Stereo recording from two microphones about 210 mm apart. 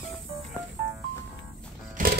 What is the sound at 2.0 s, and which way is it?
Music, 40° right (ahead or behind).